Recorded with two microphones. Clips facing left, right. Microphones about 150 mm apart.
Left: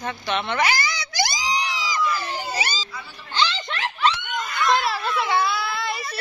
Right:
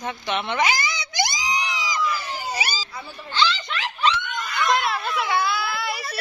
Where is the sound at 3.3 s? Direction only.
20° left (ahead or behind).